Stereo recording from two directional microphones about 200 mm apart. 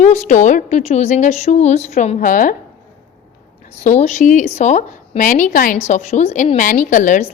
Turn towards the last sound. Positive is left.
turn(degrees=40)  # may be behind; listen again after turning